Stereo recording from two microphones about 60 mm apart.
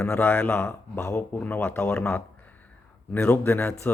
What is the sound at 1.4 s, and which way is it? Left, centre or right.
Speech, left.